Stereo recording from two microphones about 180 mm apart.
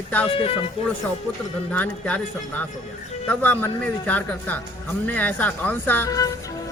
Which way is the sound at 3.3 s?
10° left (ahead or behind).